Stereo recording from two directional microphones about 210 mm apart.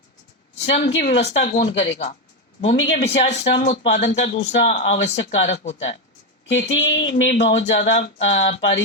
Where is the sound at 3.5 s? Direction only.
50° left (ahead or behind).